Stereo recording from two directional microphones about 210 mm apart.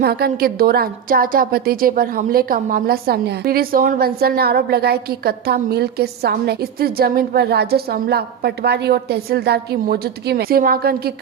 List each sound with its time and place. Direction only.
0.0 s a woman's voice: 50° right (ahead or behind)